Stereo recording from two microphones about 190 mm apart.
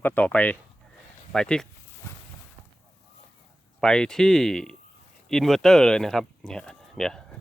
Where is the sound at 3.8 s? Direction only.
5° left (ahead or behind).